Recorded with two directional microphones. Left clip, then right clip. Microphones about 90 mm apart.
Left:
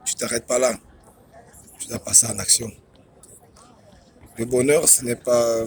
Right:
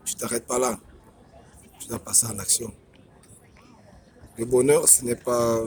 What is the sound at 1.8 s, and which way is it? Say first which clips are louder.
Speech: left 6 dB; 25° right (ahead or behind).